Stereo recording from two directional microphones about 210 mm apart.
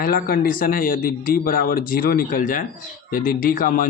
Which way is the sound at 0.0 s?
45° left (ahead or behind).